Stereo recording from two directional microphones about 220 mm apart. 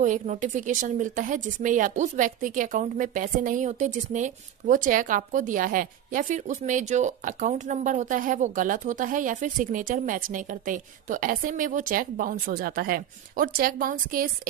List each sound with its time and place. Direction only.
0.0 s a woman's voice: 35° right (ahead or behind)